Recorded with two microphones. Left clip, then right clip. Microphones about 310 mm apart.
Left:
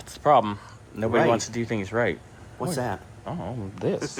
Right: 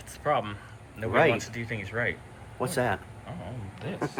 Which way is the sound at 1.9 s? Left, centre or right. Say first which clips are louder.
Left 5 dB; centre.